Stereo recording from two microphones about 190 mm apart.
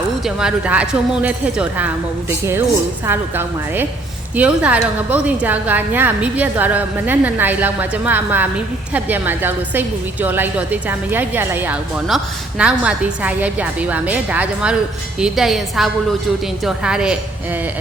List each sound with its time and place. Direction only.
0.3 s a woman's voice: 5° right (ahead or behind)
3.1 s a woman's voice: 10° right (ahead or behind)